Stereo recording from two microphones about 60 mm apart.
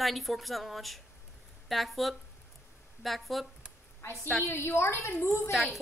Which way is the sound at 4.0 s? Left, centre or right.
Left.